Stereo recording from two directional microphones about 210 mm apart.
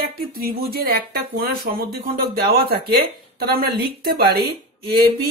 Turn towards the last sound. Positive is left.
turn(degrees=-50)  # may be behind; listen again after turning